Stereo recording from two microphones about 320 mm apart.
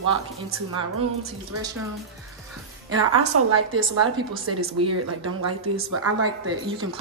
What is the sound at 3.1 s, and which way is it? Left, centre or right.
A woman's voice, right.